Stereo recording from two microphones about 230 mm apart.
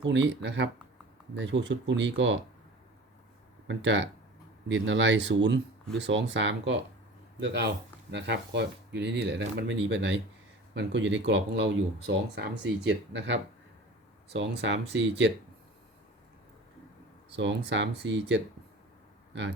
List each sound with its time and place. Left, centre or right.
0.0 s speech: right
3.7 s speech: right
14.3 s speech: right
17.3 s speech: right